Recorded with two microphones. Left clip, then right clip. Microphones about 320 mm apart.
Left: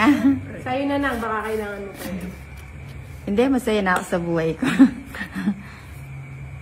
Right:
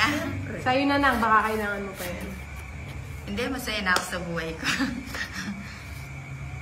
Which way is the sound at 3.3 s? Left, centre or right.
Centre.